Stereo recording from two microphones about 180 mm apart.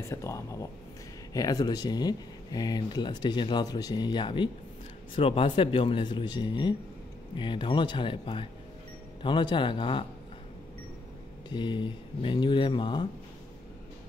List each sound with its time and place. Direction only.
0.1 s speech: 15° left (ahead or behind)
11.4 s speech: 25° left (ahead or behind)